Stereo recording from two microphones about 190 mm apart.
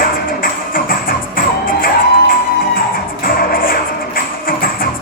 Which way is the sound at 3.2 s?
50° left (ahead or behind).